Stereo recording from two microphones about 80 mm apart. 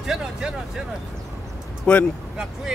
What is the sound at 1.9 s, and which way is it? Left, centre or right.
Speech, centre.